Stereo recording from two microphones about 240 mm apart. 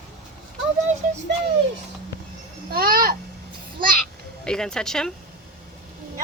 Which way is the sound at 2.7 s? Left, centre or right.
Right.